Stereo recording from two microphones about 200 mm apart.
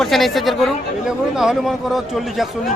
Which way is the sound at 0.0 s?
Centre (ahead or behind).